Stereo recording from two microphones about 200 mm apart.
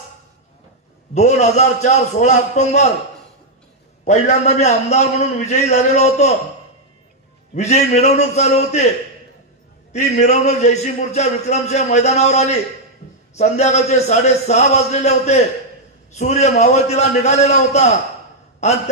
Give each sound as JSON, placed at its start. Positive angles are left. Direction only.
{"t": 1.1, "sound": "a man's voice", "side_deg": 35}
{"t": 4.0, "sound": "a man's voice", "side_deg": 35}
{"t": 7.5, "sound": "a man's voice", "side_deg": 35}
{"t": 9.9, "sound": "a man's voice", "side_deg": 35}